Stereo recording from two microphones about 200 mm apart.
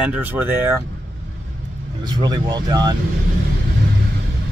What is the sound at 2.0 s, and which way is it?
Speech, 20° right (ahead or behind).